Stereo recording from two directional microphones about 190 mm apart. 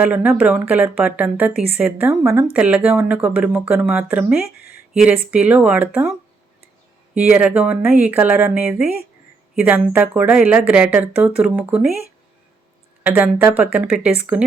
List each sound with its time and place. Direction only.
0.0 s speech: 5° right (ahead or behind)
4.4 s speech: 55° left (ahead or behind)
4.9 s speech: 5° right (ahead or behind)
13.0 s speech: 5° right (ahead or behind)